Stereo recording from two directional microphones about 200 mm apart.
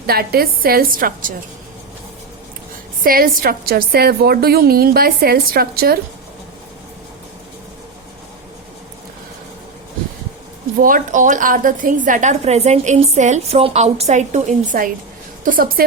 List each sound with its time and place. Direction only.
0.1 s a woman's voice: 50° right (ahead or behind)
3.0 s a woman's voice: 45° right (ahead or behind)
10.8 s a woman's voice: 45° right (ahead or behind)